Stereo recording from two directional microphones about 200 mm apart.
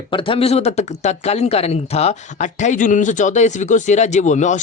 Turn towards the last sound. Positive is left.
turn(degrees=35)  # may be behind; listen again after turning